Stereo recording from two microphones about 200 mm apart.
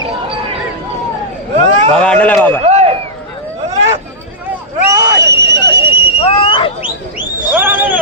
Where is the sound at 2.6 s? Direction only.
35° right (ahead or behind).